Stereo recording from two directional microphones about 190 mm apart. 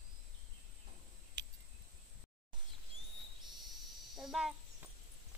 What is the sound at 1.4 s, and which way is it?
Cricket, 65° right (ahead or behind).